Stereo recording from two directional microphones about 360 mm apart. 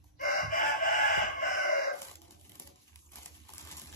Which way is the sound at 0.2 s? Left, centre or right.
Left.